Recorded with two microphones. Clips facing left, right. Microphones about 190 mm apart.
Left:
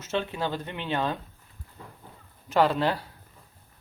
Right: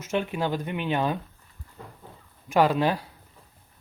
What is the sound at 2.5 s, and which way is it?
Speech, 15° right (ahead or behind).